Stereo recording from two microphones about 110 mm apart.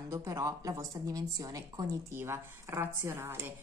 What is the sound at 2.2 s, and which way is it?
A woman's voice, 25° right (ahead or behind).